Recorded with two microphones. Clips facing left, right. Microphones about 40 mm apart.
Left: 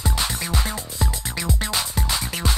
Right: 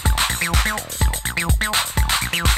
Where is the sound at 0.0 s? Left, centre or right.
Right.